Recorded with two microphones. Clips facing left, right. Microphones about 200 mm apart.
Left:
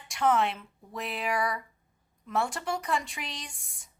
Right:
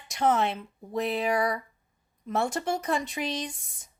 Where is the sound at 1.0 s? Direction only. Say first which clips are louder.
Right 4 dB; 40° right (ahead or behind).